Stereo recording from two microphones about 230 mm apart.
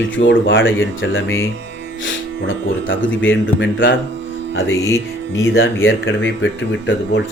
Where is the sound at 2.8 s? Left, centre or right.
Left.